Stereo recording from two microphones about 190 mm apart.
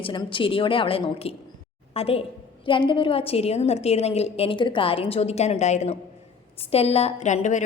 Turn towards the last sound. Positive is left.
turn(degrees=40)  # may be behind; listen again after turning